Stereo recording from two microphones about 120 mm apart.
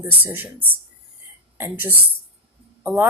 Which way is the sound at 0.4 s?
15° right (ahead or behind).